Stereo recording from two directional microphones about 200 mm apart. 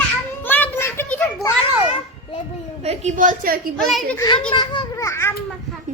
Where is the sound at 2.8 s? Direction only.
35° right (ahead or behind).